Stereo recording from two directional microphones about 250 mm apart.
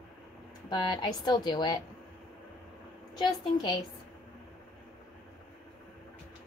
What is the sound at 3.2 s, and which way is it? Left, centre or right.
Speech, centre.